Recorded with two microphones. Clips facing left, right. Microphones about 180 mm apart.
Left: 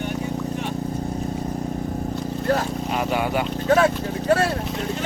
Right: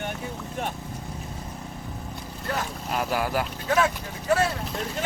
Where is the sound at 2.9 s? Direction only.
Centre (ahead or behind).